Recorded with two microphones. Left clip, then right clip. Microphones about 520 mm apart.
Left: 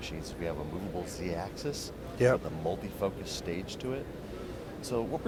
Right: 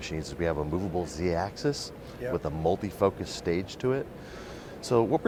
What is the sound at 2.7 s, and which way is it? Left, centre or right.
Speech, right.